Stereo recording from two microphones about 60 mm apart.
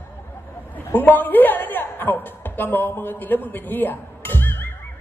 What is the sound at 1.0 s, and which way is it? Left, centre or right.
A woman's voice, left.